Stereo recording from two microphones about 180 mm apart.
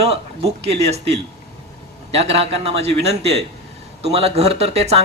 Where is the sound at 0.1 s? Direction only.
35° right (ahead or behind).